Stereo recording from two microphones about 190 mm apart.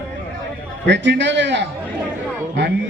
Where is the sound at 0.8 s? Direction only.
70° right (ahead or behind).